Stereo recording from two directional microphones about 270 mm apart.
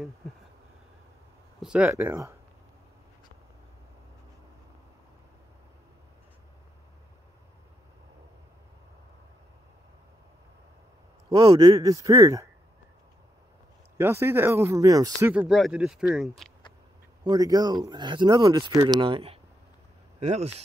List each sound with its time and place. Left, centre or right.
1.6 s speech: centre
11.2 s speech: centre
13.9 s speech: centre
17.2 s speech: centre